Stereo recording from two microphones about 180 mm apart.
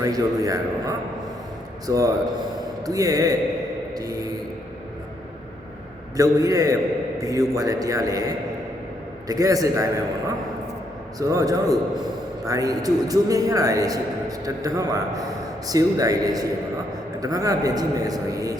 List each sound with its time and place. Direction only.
0.0 s a man's voice: 20° right (ahead or behind)
3.9 s mantra: 20° right (ahead or behind)
6.1 s a man's voice: 20° right (ahead or behind)
9.2 s a man's voice: 20° right (ahead or behind)